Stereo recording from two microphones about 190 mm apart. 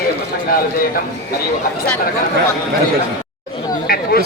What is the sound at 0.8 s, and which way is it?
Speech, 50° left (ahead or behind).